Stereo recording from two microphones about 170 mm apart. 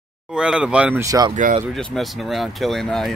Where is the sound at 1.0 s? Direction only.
20° right (ahead or behind).